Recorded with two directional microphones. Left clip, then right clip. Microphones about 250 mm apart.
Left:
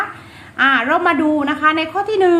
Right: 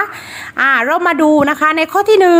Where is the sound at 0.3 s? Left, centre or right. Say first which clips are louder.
Right 2 dB; right.